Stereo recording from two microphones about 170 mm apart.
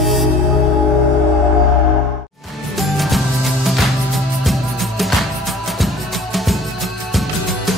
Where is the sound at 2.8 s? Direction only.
Centre (ahead or behind).